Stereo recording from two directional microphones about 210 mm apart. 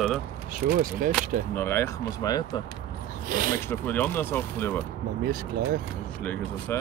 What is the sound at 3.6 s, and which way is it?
Speech, 10° left (ahead or behind).